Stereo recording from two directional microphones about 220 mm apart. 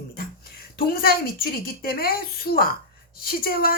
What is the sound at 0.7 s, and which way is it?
A woman's voice, 45° left (ahead or behind).